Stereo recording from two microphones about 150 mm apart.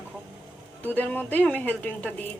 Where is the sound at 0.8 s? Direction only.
10° left (ahead or behind).